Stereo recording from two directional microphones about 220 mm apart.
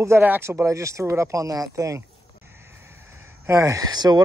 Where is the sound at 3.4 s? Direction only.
15° right (ahead or behind).